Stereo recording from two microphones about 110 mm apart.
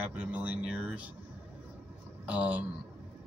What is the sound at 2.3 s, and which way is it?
Speech, 15° right (ahead or behind).